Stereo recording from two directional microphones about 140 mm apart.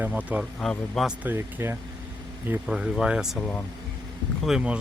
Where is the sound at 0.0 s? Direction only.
10° right (ahead or behind).